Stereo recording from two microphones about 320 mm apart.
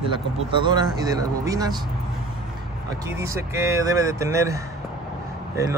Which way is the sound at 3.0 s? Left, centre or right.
Centre.